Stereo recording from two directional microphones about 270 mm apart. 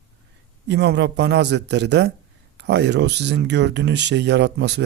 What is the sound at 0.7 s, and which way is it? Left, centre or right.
A man's voice, right.